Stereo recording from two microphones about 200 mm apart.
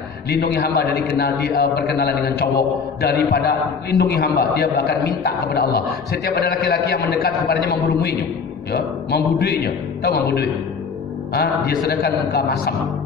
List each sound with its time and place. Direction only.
0.3 s a man's voice: 50° left (ahead or behind)
8.7 s a man's voice: 55° left (ahead or behind)